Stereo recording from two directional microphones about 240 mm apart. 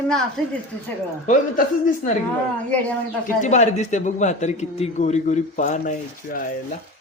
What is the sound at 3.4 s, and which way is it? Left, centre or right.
A man's voice, left.